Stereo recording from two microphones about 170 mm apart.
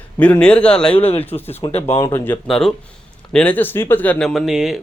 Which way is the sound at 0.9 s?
35° left (ahead or behind).